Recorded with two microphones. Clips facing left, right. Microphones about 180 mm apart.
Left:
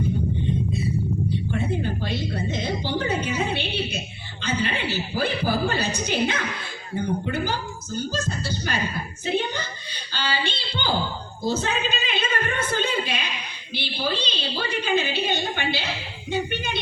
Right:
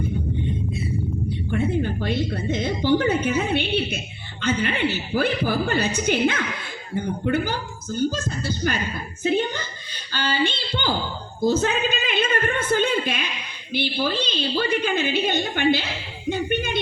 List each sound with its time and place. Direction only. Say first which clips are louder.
1.5 s a woman's voice: right 7 dB; 55° right (ahead or behind)
10.1 s a woman's voice: right 4 dB; 50° right (ahead or behind)